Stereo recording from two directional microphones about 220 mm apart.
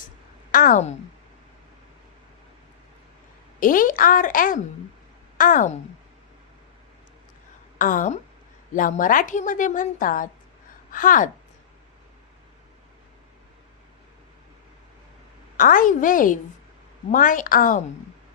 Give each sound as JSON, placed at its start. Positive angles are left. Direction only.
{"t": 0.5, "sound": "a woman's voice", "side_deg": 40}
{"t": 3.6, "sound": "a woman's voice", "side_deg": 40}
{"t": 7.8, "sound": "a woman's voice", "side_deg": 40}
{"t": 15.5, "sound": "a woman's voice", "side_deg": 40}